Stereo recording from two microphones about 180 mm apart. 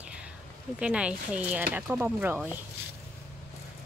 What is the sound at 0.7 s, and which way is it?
Speech, 5° right (ahead or behind).